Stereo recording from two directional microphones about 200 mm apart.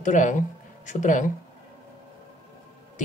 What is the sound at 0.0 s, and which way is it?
Speech, 40° left (ahead or behind).